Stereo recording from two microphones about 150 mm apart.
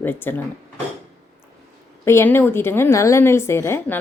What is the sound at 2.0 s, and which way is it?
A woman's voice, 15° left (ahead or behind).